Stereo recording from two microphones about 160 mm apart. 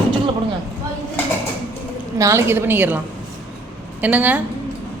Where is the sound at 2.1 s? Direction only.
20° right (ahead or behind).